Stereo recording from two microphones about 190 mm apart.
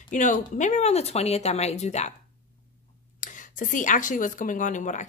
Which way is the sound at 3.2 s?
45° left (ahead or behind).